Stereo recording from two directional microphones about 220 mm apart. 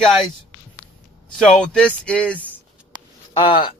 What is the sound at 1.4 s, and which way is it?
A man's voice, 5° left (ahead or behind).